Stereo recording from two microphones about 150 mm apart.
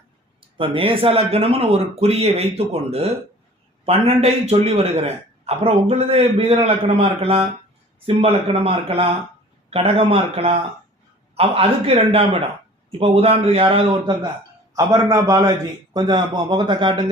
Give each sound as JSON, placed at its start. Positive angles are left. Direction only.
{"t": 0.5, "sound": "a man's voice", "side_deg": -35}